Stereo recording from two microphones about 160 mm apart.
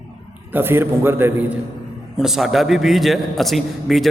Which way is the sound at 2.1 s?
Centre (ahead or behind).